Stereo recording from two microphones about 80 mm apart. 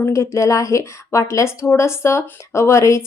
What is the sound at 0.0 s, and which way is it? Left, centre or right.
Speech, left.